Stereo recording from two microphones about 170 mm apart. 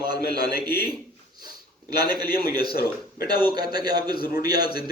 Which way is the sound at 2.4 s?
65° left (ahead or behind).